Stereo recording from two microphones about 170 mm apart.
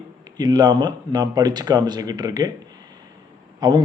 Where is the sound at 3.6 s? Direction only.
25° right (ahead or behind).